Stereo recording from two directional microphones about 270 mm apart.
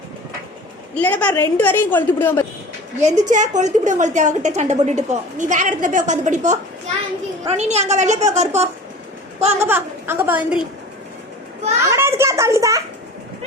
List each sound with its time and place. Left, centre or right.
0.9 s a woman's voice: centre
3.0 s a woman's voice: right
9.6 s speech: centre
11.9 s speech: centre